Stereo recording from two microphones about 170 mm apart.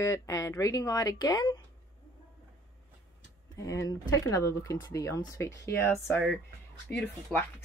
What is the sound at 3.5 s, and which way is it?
A woman's voice, 20° left (ahead or behind).